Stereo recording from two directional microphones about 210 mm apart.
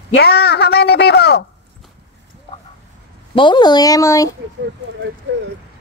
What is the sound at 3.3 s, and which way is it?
Speech, 20° left (ahead or behind).